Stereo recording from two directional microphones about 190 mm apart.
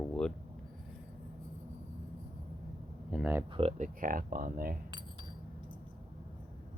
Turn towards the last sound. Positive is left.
turn(degrees=-25)  # may be behind; listen again after turning